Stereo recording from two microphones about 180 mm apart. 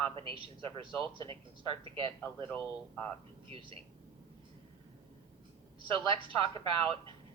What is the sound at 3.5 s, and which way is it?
Speech, 30° right (ahead or behind).